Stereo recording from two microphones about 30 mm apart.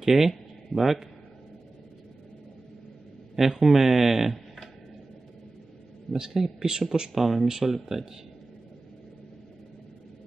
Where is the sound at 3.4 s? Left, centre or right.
Centre.